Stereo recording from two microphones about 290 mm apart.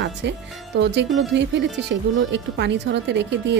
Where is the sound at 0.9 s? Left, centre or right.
Right.